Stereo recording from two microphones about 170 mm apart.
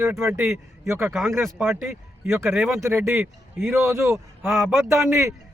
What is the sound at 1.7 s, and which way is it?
A man's voice, 15° right (ahead or behind).